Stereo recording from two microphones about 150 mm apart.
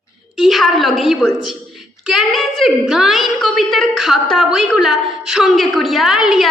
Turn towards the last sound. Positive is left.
turn(degrees=-5)  # may be behind; listen again after turning